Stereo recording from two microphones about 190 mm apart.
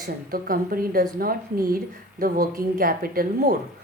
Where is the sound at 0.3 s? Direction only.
50° right (ahead or behind).